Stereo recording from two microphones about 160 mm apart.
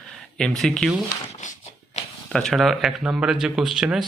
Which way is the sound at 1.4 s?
50° left (ahead or behind).